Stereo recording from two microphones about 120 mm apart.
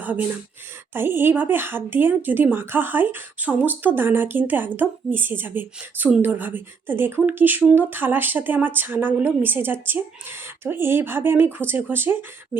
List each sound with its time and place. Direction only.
0.0 s speech: 15° right (ahead or behind)